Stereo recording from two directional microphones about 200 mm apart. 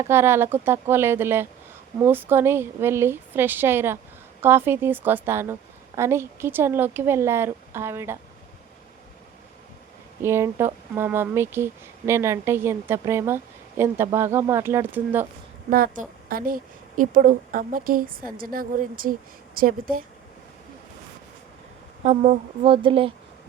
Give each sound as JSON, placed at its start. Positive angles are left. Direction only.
{"t": 0.0, "sound": "speech", "side_deg": -10}
{"t": 10.2, "sound": "speech", "side_deg": -15}
{"t": 15.7, "sound": "a woman's voice", "side_deg": -45}
{"t": 22.0, "sound": "speech", "side_deg": -35}